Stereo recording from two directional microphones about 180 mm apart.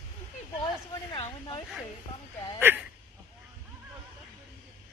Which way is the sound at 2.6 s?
10° right (ahead or behind).